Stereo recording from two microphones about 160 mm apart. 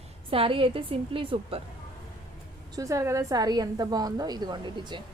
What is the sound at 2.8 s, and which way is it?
A woman's voice, 20° right (ahead or behind).